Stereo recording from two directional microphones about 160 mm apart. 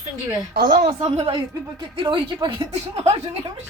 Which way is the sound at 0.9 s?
40° right (ahead or behind).